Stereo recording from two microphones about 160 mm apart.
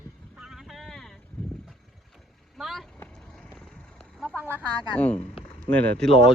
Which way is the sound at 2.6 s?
Centre (ahead or behind).